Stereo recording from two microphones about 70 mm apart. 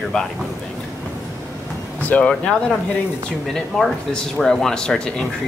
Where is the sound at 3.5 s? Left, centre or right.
Centre.